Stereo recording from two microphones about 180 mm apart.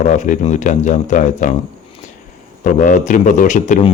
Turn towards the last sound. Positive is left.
turn(degrees=40)  # may be behind; listen again after turning